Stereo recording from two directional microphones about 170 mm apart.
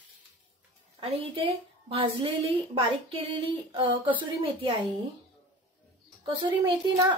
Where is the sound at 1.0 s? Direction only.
35° right (ahead or behind).